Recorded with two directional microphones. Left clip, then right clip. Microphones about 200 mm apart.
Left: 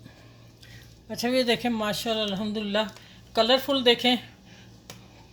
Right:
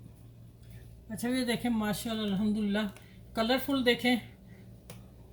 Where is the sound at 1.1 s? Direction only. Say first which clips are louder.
Left 9 dB; 35° left (ahead or behind).